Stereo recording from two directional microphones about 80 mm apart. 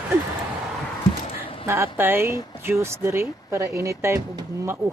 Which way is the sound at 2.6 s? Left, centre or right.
Right.